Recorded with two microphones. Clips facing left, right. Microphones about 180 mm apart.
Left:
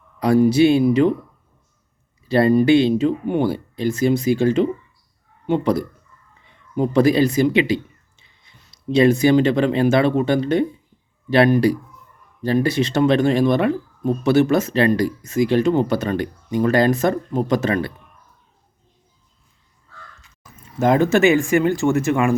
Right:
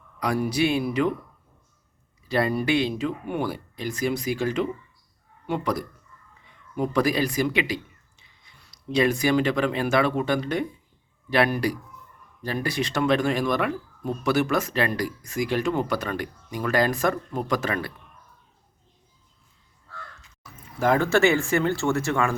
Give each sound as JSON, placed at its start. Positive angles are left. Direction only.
{"t": 0.2, "sound": "speech", "side_deg": 25}
{"t": 2.2, "sound": "speech", "side_deg": 30}
{"t": 20.7, "sound": "speech", "side_deg": 20}